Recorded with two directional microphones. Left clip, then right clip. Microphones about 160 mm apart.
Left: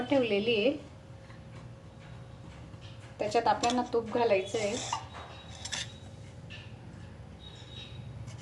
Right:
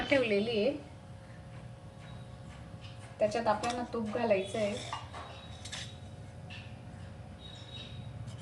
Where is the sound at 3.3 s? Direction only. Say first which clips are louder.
Left 4 dB; 55° left (ahead or behind).